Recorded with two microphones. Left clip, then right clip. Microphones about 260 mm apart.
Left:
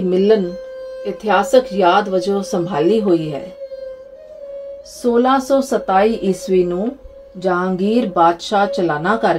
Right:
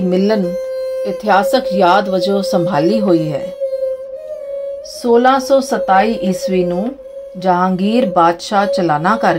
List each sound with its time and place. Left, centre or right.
0.1 s speech: right
5.1 s a woman's voice: right